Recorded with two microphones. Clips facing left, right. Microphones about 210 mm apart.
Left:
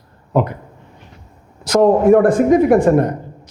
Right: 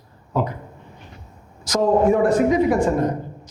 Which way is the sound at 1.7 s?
60° left (ahead or behind).